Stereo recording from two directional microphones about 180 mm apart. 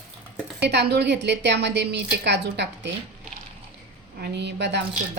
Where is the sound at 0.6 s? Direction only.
70° right (ahead or behind).